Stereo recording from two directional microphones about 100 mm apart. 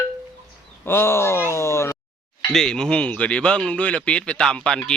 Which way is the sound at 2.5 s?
5° left (ahead or behind).